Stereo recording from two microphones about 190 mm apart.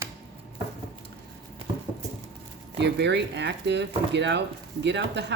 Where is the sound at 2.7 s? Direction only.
65° right (ahead or behind).